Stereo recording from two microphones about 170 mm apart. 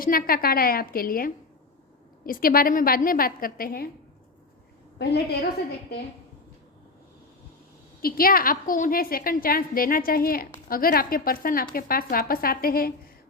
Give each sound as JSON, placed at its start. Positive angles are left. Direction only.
{"t": 0.0, "sound": "a woman's voice", "side_deg": 60}
{"t": 4.9, "sound": "a woman's voice", "side_deg": 85}
{"t": 8.0, "sound": "a woman's voice", "side_deg": 60}